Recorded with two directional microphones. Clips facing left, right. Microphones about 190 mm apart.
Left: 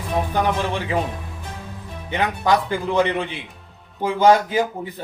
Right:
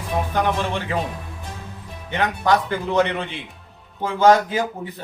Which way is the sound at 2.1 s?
10° left (ahead or behind).